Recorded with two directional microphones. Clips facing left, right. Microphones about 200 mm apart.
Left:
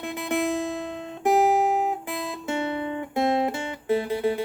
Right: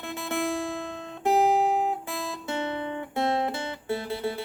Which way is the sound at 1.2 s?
15° left (ahead or behind).